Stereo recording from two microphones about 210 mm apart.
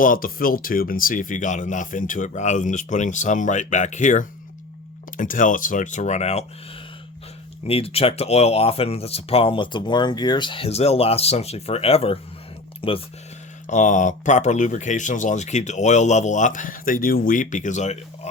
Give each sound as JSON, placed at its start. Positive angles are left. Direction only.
{"t": 0.0, "sound": "speech", "side_deg": 40}
{"t": 7.7, "sound": "speech", "side_deg": 25}
{"t": 13.7, "sound": "speech", "side_deg": 35}